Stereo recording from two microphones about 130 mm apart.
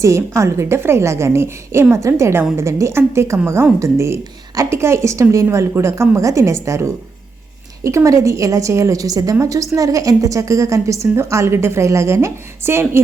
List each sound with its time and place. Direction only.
0.0 s a woman's voice: 20° right (ahead or behind)